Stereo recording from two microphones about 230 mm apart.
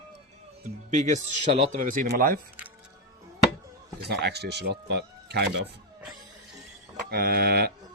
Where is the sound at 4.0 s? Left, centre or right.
Right.